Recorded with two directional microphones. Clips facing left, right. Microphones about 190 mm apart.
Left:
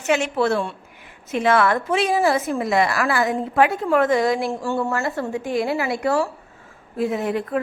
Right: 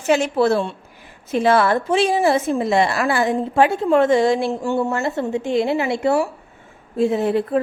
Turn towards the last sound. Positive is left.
turn(degrees=-30)  # may be behind; listen again after turning